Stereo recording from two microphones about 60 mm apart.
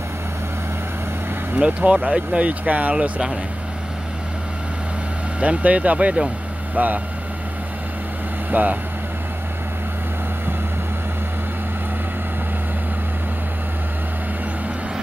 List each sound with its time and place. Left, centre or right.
1.6 s speech: right
5.4 s speech: right
8.5 s speech: right